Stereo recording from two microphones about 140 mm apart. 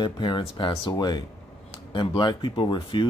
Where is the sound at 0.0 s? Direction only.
35° left (ahead or behind).